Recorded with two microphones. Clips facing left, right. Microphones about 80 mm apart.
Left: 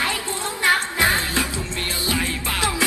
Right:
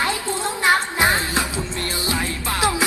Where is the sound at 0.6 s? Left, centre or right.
Right.